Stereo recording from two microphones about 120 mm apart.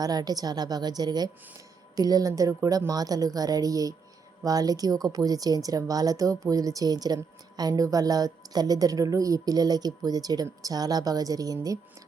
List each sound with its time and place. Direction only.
0.0 s speech: 35° right (ahead or behind)